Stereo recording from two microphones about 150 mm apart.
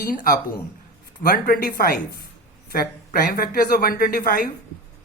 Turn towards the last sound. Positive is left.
turn(degrees=70)  # may be behind; listen again after turning